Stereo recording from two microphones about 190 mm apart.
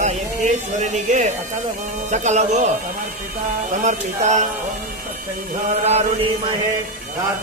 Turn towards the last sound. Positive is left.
turn(degrees=-35)  # may be behind; listen again after turning